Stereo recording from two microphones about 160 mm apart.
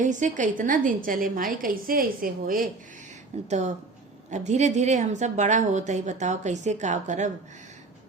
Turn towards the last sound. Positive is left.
turn(degrees=-50)  # may be behind; listen again after turning